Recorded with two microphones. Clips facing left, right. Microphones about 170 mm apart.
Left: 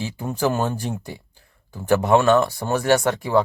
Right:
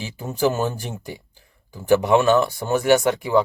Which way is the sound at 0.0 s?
20° right (ahead or behind).